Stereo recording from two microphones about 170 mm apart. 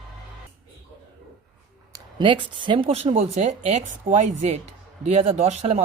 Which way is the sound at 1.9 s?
30° right (ahead or behind).